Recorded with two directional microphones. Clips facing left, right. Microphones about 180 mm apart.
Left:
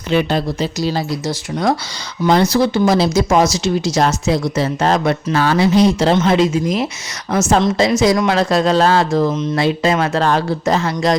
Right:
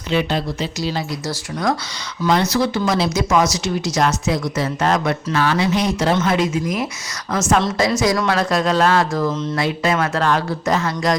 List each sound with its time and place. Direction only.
0.1 s speech: 45° left (ahead or behind)
1.3 s a woman's voice: 25° left (ahead or behind)